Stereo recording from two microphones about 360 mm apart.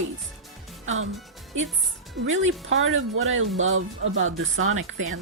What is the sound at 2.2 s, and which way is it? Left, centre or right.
Speech, right.